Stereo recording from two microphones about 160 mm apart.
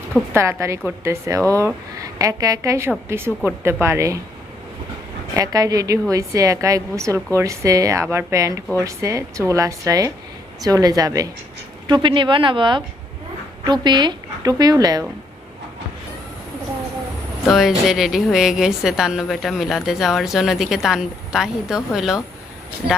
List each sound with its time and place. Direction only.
0.3 s a woman's voice: 20° right (ahead or behind)
5.3 s a woman's voice: 20° right (ahead or behind)
17.5 s a woman's voice: centre (ahead or behind)